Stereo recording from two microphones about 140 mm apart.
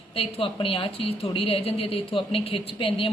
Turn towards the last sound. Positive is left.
turn(degrees=40)  # may be behind; listen again after turning